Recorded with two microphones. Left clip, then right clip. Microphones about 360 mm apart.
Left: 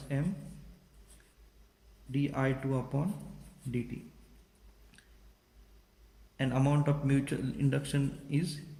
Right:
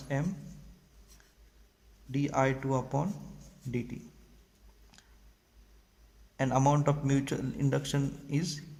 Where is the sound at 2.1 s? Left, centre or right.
Centre.